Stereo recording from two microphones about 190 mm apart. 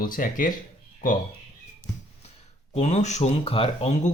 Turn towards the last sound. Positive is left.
turn(degrees=35)  # may be behind; listen again after turning